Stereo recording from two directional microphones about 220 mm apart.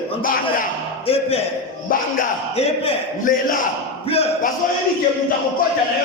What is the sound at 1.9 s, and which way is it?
Speech, 35° left (ahead or behind).